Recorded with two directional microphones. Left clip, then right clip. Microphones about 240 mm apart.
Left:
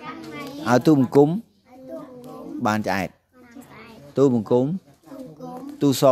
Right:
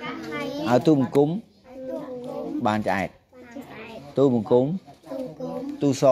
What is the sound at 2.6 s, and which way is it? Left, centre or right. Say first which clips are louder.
Speech: left 1 dB; left.